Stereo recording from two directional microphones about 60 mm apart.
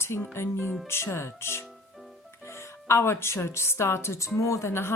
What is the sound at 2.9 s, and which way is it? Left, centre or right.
A woman's voice, left.